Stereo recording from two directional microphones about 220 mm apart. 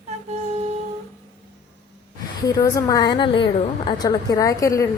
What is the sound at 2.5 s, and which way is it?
A woman's voice, 15° left (ahead or behind).